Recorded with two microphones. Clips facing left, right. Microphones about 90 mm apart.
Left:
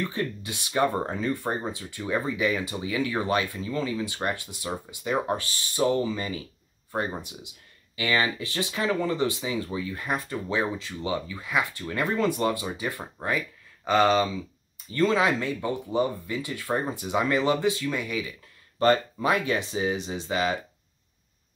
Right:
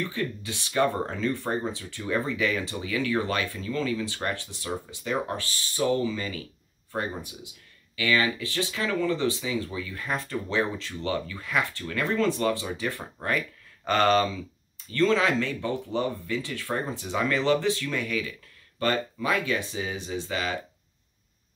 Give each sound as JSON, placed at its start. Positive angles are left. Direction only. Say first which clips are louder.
{"t": 0.0, "sound": "speech", "louder": "left 1 dB", "side_deg": 20}